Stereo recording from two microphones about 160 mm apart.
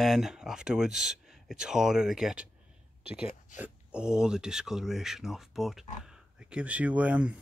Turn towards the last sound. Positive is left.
turn(degrees=-10)  # may be behind; listen again after turning